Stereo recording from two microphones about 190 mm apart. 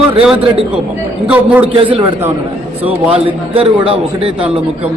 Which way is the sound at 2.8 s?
30° right (ahead or behind).